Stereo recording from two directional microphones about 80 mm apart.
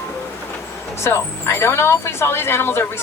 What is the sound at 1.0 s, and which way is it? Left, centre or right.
Speech, left.